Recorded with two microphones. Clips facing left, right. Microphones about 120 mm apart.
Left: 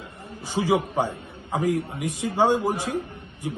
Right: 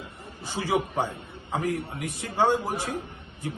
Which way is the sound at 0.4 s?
20° left (ahead or behind).